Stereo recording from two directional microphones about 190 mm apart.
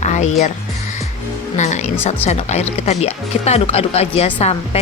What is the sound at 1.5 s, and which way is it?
Music, 40° left (ahead or behind).